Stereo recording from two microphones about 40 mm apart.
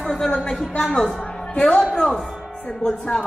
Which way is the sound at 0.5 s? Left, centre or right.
Centre.